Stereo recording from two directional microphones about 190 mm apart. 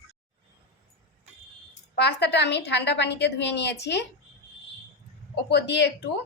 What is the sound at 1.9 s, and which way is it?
A woman's voice, 60° left (ahead or behind).